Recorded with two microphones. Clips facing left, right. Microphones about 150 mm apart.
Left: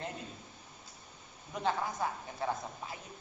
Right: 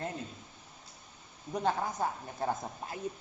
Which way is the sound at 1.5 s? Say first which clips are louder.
Right 2 dB; 40° right (ahead or behind).